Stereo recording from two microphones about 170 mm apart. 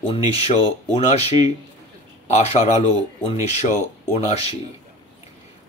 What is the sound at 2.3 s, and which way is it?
Speech, 40° left (ahead or behind).